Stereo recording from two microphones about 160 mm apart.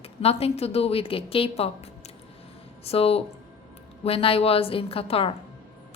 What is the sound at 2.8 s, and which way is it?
Speech, 40° left (ahead or behind).